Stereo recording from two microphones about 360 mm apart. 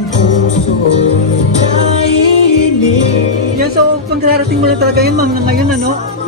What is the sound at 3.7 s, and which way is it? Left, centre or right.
Speech, right.